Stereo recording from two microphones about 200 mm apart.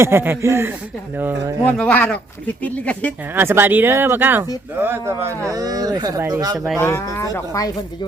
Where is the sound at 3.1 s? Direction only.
10° right (ahead or behind).